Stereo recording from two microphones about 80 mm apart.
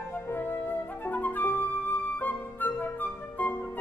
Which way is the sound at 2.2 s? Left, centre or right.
Left.